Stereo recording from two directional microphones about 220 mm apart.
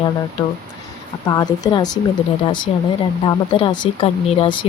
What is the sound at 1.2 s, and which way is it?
Speech, 15° left (ahead or behind).